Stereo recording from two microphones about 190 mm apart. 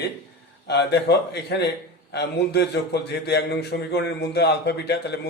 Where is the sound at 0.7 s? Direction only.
60° left (ahead or behind).